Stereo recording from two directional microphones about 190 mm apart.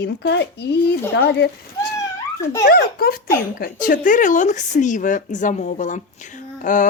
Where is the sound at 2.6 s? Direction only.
55° left (ahead or behind).